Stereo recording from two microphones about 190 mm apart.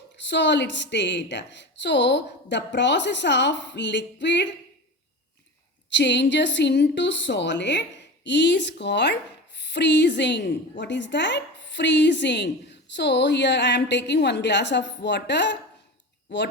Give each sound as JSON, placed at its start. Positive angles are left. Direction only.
{"t": 0.2, "sound": "a woman's voice", "side_deg": 65}
{"t": 5.9, "sound": "a woman's voice", "side_deg": 65}